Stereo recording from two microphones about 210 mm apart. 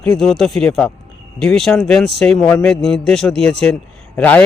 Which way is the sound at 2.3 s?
15° left (ahead or behind).